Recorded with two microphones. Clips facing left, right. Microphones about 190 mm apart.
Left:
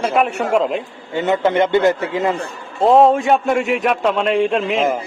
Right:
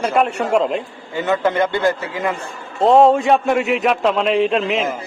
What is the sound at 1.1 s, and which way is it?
A man's voice, 20° left (ahead or behind).